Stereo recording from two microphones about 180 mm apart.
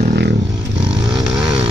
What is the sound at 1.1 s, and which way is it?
Vehicle, centre (ahead or behind).